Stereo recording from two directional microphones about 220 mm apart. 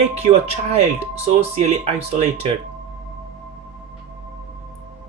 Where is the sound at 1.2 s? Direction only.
30° right (ahead or behind).